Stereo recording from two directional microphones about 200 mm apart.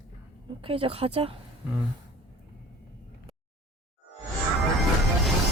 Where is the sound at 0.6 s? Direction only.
25° right (ahead or behind).